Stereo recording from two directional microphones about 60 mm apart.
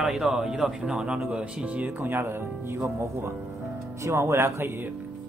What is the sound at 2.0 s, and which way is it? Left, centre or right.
Speech, right.